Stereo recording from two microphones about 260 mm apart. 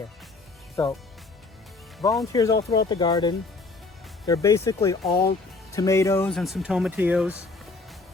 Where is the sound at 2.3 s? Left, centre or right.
Centre.